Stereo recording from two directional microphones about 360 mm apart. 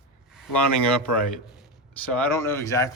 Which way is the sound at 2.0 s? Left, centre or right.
Centre.